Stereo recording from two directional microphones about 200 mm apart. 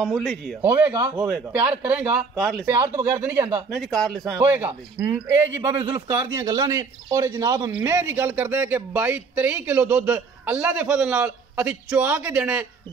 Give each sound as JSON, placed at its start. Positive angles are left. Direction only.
{"t": 0.0, "sound": "speech", "side_deg": 0}
{"t": 0.6, "sound": "speech", "side_deg": -10}
{"t": 0.9, "sound": "a man's voice", "side_deg": -20}
{"t": 1.5, "sound": "speech", "side_deg": -5}
{"t": 2.3, "sound": "speech", "side_deg": 5}
{"t": 3.2, "sound": "speech", "side_deg": -10}
{"t": 3.7, "sound": "speech", "side_deg": 0}
{"t": 4.2, "sound": "speech", "side_deg": -10}